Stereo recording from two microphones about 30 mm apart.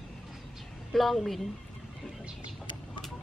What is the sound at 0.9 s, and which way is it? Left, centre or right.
Speech, centre.